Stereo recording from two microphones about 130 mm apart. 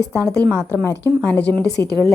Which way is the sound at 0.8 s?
15° left (ahead or behind).